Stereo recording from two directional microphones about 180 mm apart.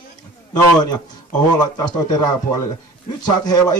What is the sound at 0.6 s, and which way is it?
Speech, 20° left (ahead or behind).